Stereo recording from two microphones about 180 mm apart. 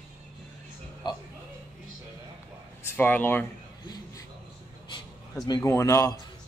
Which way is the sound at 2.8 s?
10° left (ahead or behind).